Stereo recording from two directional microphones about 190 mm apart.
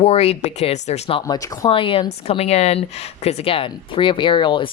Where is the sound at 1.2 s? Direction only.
20° left (ahead or behind).